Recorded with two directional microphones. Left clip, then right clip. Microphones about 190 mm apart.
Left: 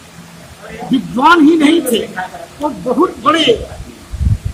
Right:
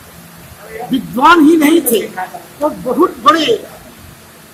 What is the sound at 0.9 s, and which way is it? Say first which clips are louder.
A man's voice: right 1 dB; 20° right (ahead or behind).